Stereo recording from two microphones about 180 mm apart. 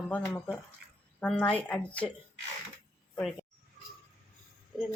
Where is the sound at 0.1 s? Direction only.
5° left (ahead or behind).